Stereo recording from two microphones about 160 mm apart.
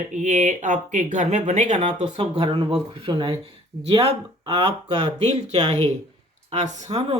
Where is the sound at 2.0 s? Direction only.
35° right (ahead or behind).